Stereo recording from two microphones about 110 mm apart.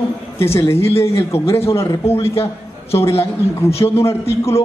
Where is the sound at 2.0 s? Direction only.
60° left (ahead or behind).